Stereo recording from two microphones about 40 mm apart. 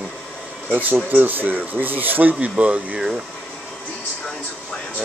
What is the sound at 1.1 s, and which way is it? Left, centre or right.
Speech, right.